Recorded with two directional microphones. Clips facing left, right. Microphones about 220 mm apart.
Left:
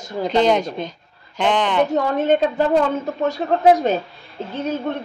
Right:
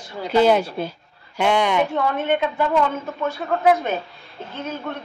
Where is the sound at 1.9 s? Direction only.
40° left (ahead or behind).